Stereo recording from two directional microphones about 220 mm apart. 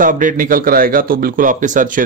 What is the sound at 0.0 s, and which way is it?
Speech, 35° right (ahead or behind).